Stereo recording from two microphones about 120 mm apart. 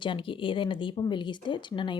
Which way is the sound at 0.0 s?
45° left (ahead or behind).